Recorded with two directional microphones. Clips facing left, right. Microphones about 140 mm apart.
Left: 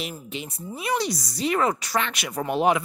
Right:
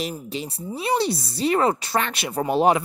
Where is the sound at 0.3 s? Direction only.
35° right (ahead or behind).